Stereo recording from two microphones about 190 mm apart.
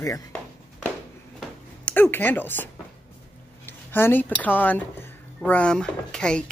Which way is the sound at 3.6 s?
10° left (ahead or behind).